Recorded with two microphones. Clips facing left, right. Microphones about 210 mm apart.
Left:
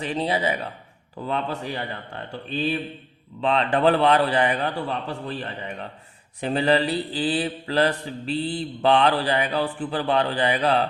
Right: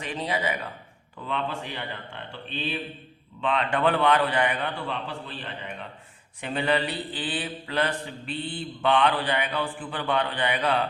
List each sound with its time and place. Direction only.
0.0 s mantra: 30° left (ahead or behind)